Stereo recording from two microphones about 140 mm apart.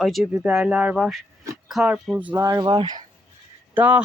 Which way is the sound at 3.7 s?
10° right (ahead or behind).